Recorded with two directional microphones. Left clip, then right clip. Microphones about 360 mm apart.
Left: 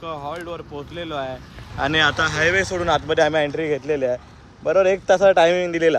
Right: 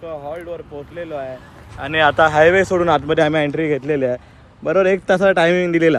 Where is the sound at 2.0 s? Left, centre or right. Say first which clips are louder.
Right 9 dB; centre.